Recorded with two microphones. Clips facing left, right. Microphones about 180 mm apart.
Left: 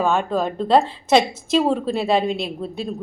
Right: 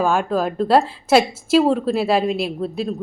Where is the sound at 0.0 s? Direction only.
10° right (ahead or behind).